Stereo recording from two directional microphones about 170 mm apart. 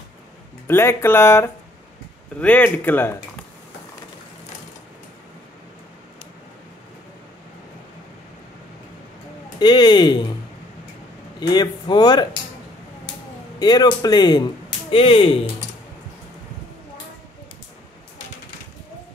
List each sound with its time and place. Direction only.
0.7 s speech: 15° left (ahead or behind)
9.6 s speech: 25° left (ahead or behind)
11.3 s speech: 25° left (ahead or behind)
13.6 s speech: 25° left (ahead or behind)